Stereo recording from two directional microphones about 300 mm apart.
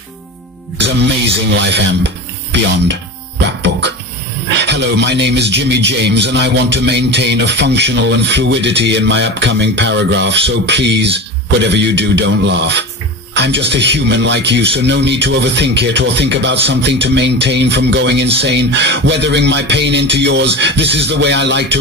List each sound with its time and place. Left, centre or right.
0.7 s speech: right
3.4 s music: right
4.5 s speech: right